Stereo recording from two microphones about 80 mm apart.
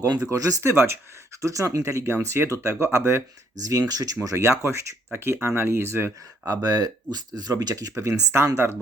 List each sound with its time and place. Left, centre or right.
0.3 s speech: right
0.7 s speech: right
6.5 s speech: right